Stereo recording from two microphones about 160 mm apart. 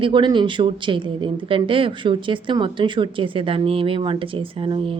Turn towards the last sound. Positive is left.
turn(degrees=-35)  # may be behind; listen again after turning